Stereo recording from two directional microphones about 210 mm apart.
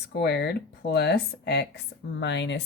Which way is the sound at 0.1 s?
55° left (ahead or behind).